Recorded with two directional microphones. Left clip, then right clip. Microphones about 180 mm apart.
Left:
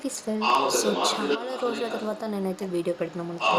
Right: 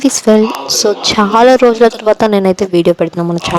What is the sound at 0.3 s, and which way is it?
Speech, 60° right (ahead or behind).